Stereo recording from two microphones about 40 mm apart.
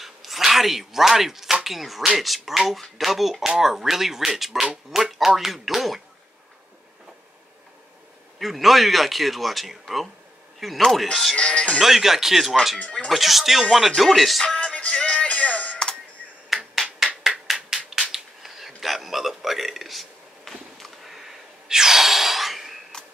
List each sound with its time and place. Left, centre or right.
0.0 s speech: centre
8.4 s speech: centre
11.3 s speech: left
11.8 s speech: centre
14.4 s music: left
16.5 s finger snapping: centre
17.2 s a sound: centre